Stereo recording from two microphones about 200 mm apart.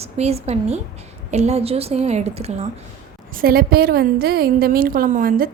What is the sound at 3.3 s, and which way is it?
A woman's voice, 45° right (ahead or behind).